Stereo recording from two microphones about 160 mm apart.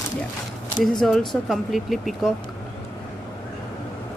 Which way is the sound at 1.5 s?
Centre (ahead or behind).